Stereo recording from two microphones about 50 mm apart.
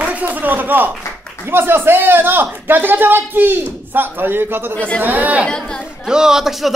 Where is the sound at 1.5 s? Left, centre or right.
Right.